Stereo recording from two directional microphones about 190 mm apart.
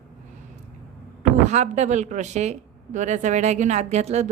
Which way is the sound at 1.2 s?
40° right (ahead or behind).